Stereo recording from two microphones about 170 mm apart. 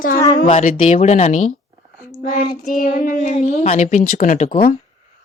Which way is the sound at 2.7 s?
55° left (ahead or behind).